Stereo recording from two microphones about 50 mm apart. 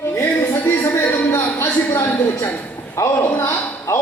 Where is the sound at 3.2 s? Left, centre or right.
Left.